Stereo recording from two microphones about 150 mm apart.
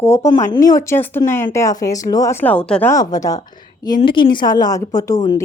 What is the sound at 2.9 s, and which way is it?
Speech, 25° left (ahead or behind).